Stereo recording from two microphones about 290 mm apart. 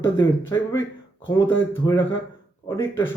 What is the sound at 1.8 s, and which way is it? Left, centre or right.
Speech, centre.